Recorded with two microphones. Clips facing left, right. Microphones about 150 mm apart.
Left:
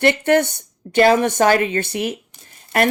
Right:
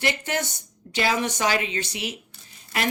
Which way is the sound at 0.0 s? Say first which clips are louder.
Left 11 dB; 55° left (ahead or behind).